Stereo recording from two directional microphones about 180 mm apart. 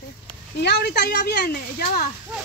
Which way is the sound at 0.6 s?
65° left (ahead or behind).